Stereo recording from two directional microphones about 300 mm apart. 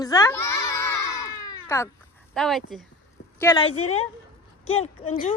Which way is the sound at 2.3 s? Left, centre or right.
Centre.